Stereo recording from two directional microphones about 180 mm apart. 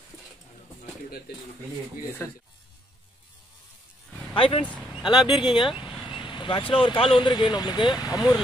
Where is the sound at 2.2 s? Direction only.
10° left (ahead or behind).